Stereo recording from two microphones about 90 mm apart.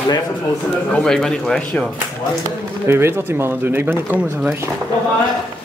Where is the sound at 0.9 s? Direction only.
10° left (ahead or behind).